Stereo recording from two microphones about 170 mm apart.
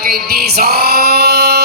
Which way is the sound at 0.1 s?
65° right (ahead or behind).